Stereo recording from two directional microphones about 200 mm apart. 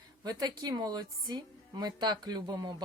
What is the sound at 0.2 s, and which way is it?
A woman's voice, 20° right (ahead or behind).